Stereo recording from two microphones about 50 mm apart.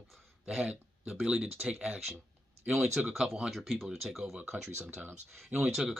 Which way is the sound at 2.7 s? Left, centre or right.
Centre.